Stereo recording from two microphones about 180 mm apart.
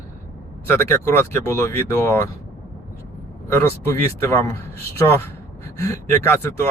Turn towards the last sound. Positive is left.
turn(degrees=15)  # may be behind; listen again after turning